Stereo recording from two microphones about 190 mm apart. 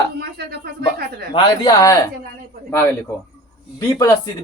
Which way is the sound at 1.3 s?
30° left (ahead or behind).